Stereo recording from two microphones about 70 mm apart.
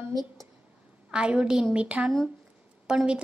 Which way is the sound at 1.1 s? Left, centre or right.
Centre.